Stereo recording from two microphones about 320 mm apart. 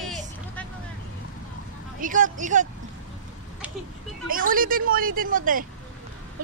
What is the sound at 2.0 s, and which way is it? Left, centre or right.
Speech, right.